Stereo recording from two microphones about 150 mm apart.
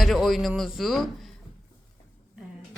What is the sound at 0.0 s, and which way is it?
Speech, centre (ahead or behind).